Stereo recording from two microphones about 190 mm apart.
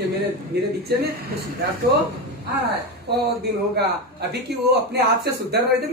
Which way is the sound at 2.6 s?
60° right (ahead or behind).